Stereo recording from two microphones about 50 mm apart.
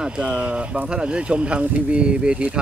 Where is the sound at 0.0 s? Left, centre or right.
Centre.